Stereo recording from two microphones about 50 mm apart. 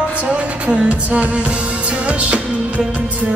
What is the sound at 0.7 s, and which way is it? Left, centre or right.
Music, right.